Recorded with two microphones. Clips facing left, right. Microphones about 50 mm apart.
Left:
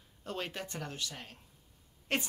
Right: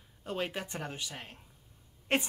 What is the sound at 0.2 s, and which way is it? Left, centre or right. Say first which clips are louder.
Speech: right 3 dB; centre.